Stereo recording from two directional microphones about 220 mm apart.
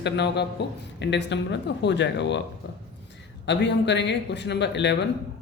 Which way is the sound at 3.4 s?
55° left (ahead or behind).